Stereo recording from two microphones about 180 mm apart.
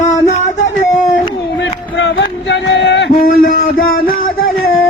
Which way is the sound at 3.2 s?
50° left (ahead or behind).